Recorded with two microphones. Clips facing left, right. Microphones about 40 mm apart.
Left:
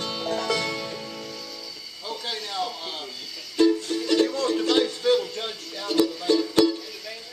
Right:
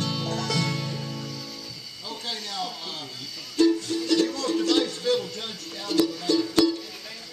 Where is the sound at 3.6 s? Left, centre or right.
Centre.